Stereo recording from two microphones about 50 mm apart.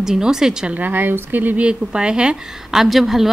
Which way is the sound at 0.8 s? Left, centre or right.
Right.